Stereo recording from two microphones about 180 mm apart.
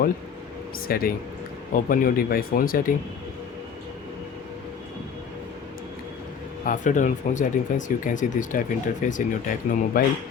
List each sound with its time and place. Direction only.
0.9 s speech: 55° left (ahead or behind)
6.7 s speech: 45° left (ahead or behind)